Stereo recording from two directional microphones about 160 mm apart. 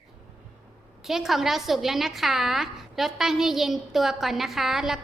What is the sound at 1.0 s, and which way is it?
A woman's voice, centre (ahead or behind).